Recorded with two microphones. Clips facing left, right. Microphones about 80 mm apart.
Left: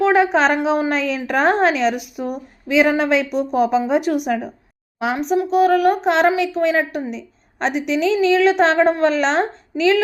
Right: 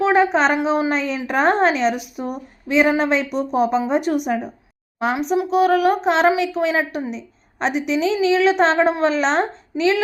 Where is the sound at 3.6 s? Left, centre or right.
Left.